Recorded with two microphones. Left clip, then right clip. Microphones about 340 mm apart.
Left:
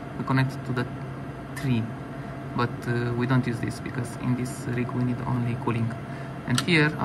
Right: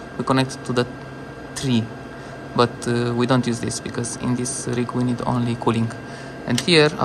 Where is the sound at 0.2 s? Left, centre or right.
Centre.